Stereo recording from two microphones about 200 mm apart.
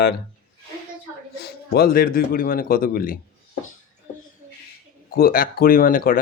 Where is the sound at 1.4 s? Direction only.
50° left (ahead or behind).